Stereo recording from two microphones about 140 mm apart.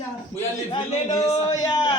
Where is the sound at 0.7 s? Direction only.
30° left (ahead or behind).